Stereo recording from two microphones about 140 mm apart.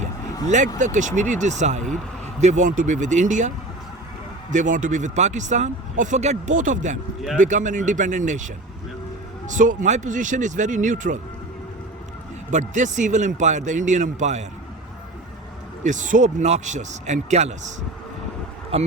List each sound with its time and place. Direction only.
0.8 s speech: 60° right (ahead or behind)
4.5 s speech: 65° right (ahead or behind)
9.6 s speech: 60° right (ahead or behind)
12.5 s speech: 60° right (ahead or behind)
15.8 s speech: 65° right (ahead or behind)
18.7 s speech: 45° right (ahead or behind)